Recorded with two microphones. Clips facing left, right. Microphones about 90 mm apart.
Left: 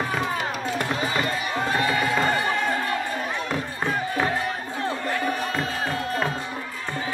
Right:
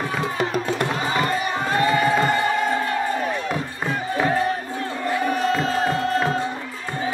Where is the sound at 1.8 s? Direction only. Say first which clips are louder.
Right 7 dB; 35° right (ahead or behind).